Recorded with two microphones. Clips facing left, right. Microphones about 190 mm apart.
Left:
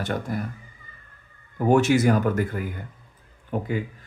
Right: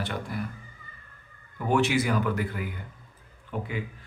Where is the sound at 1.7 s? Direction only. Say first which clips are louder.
Left 6 dB; 45° left (ahead or behind).